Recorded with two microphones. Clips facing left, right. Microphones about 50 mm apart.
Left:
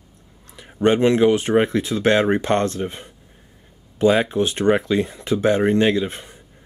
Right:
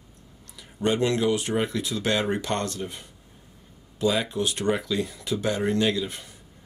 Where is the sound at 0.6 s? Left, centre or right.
Left.